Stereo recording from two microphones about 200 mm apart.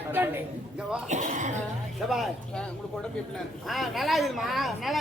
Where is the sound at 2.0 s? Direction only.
Centre (ahead or behind).